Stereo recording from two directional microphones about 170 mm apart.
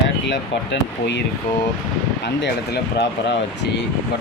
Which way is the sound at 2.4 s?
85° left.